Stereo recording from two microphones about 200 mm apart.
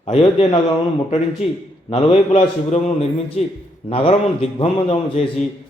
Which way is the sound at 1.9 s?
30° left (ahead or behind).